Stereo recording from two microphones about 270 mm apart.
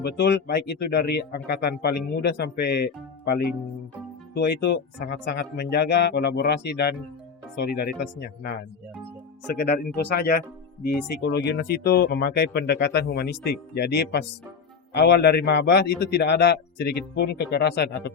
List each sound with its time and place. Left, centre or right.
0.0 s a man's voice: left
9.6 s a man's voice: left